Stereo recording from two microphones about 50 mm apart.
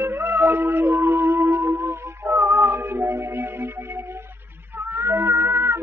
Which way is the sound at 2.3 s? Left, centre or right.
Right.